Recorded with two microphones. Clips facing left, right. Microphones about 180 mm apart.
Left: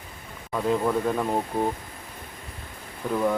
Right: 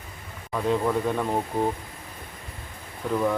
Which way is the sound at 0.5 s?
Centre (ahead or behind).